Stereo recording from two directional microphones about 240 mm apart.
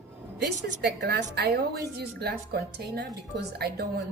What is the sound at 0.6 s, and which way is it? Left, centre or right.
Speech, right.